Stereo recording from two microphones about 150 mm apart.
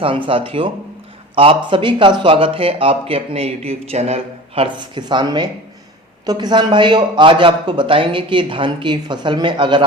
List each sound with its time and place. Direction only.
0.3 s speech: 35° right (ahead or behind)